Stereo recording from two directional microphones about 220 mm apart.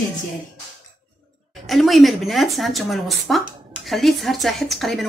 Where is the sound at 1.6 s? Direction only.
Centre (ahead or behind).